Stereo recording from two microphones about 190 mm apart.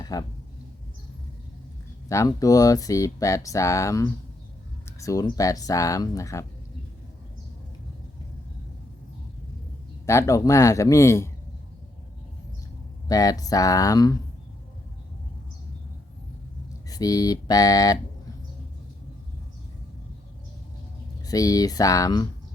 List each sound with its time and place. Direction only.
0.0 s speech: 20° left (ahead or behind)
2.0 s speech: 15° left (ahead or behind)
10.1 s speech: 15° left (ahead or behind)
13.1 s speech: 20° left (ahead or behind)
16.9 s speech: 20° left (ahead or behind)
21.2 s speech: 20° left (ahead or behind)